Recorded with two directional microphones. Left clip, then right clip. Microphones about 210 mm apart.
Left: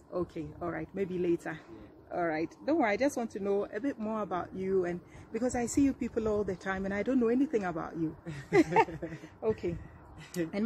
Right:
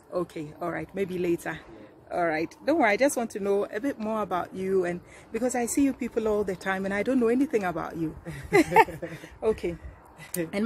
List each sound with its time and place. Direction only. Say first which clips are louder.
0.1 s speech: right 5 dB; 15° right (ahead or behind)